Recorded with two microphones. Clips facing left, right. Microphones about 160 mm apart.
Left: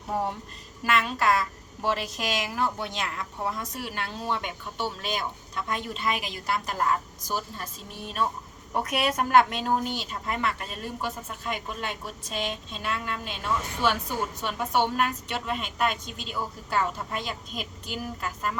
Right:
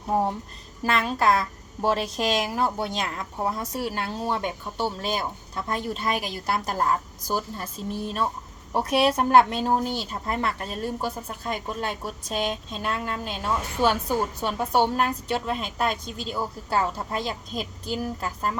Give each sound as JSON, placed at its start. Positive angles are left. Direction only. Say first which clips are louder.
{"t": 0.1, "sound": "a woman's voice", "louder": "right 5 dB", "side_deg": -30}
{"t": 7.9, "sound": "a woman's voice", "louder": "right 1 dB", "side_deg": -30}